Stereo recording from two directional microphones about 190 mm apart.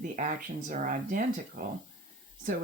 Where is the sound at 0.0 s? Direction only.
45° right (ahead or behind).